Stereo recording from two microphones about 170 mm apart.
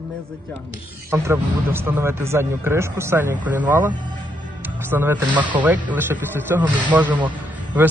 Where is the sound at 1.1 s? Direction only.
15° right (ahead or behind).